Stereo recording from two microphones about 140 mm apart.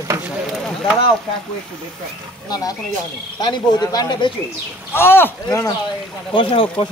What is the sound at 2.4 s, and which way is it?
Speech, 30° left (ahead or behind).